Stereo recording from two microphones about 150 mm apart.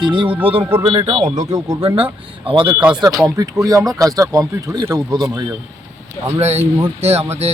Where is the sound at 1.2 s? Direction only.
25° right (ahead or behind).